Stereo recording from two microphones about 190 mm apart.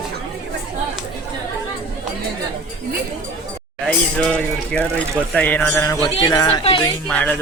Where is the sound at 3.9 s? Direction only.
5° left (ahead or behind).